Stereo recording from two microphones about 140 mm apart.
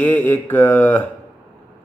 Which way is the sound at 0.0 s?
15° left (ahead or behind).